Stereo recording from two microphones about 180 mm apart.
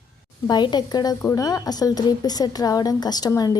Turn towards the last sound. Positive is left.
turn(degrees=20)  # may be behind; listen again after turning